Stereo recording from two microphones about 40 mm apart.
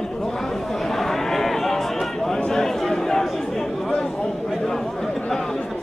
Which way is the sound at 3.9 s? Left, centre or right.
Centre.